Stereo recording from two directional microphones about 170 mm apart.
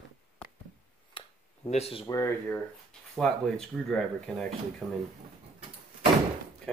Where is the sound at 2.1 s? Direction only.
15° left (ahead or behind).